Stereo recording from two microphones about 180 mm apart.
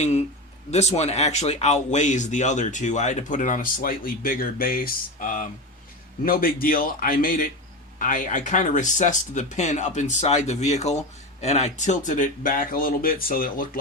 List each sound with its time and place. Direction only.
0.0 s speech: 40° left (ahead or behind)